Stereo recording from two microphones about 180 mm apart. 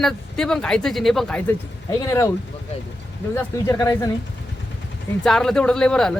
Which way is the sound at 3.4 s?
15° left (ahead or behind).